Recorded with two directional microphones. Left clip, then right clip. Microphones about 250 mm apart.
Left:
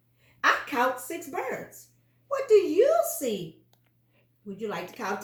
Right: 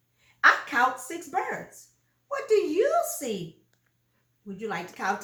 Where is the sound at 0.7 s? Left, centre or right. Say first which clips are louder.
Right 2 dB; centre.